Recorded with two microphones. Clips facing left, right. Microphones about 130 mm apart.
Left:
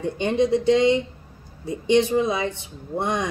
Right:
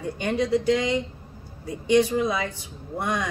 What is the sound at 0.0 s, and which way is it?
Speech, 25° left (ahead or behind).